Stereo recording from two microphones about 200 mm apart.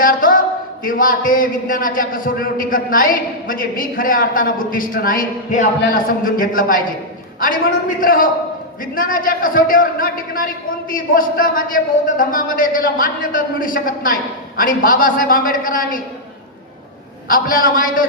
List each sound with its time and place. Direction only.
0.0 s a sound: 45° left (ahead or behind)
0.9 s a man's voice: 45° left (ahead or behind)
17.2 s a man's voice: 45° left (ahead or behind)